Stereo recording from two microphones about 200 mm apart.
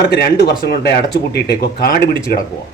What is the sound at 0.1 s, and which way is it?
Speech, 50° left (ahead or behind).